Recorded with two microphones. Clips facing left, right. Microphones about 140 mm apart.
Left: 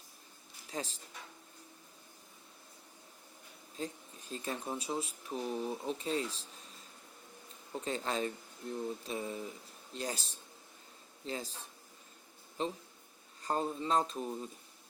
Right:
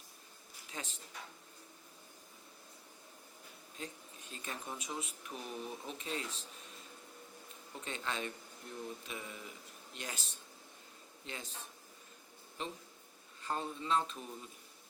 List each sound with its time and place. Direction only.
0.7 s speech: 35° left (ahead or behind)
3.8 s speech: 35° left (ahead or behind)
7.7 s speech: 35° left (ahead or behind)